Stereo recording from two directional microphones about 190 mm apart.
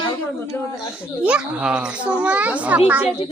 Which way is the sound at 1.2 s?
5° right (ahead or behind).